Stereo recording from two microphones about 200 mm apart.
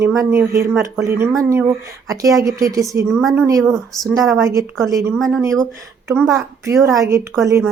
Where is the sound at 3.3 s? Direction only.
15° right (ahead or behind).